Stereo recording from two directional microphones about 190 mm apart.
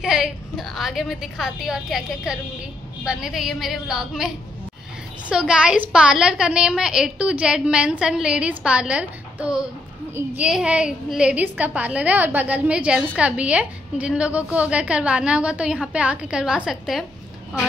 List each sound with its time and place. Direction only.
0.0 s a woman's voice: centre (ahead or behind)
5.3 s a woman's voice: 5° right (ahead or behind)